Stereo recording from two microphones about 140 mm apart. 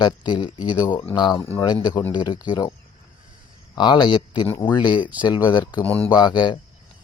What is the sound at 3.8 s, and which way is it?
Speech, 30° left (ahead or behind).